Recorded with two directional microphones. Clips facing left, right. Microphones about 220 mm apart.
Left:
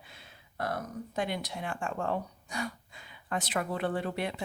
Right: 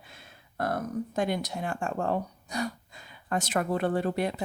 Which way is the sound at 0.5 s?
50° right (ahead or behind).